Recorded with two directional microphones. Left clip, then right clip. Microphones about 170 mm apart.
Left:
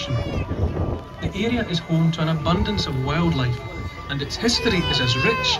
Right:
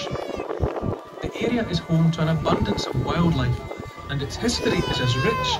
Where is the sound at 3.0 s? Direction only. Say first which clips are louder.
Left 1 dB; 90° right.